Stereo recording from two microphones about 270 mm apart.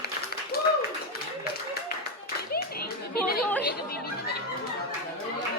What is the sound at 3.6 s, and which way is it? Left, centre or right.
Chatter, left.